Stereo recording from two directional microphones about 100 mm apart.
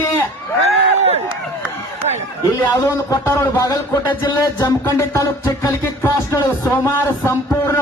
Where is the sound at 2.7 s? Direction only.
30° left (ahead or behind).